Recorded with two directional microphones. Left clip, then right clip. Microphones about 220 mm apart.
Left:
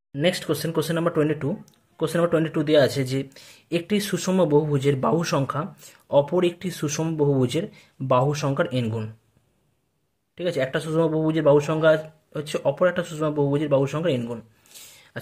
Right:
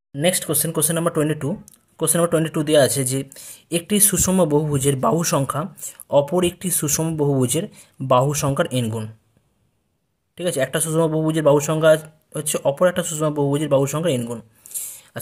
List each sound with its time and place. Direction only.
0.1 s speech: 30° right (ahead or behind)
10.3 s speech: 30° right (ahead or behind)